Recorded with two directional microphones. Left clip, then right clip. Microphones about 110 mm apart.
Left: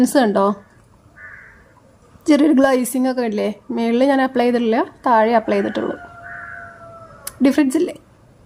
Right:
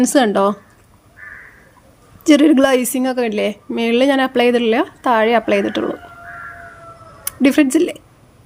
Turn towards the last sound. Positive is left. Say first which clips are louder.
# right 3 dB
turn(degrees=10)  # may be behind; listen again after turning